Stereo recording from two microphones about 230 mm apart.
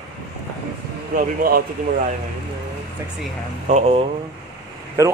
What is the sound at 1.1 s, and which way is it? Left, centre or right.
Speech, right.